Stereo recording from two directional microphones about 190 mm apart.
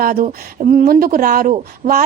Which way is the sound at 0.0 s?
50° right (ahead or behind).